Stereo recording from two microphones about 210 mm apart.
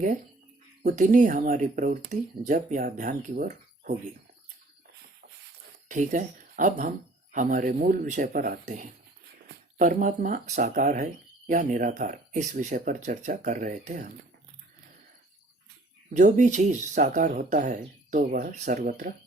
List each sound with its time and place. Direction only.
0.8 s speech: 40° right (ahead or behind)
5.9 s speech: 35° right (ahead or behind)
16.1 s speech: 35° right (ahead or behind)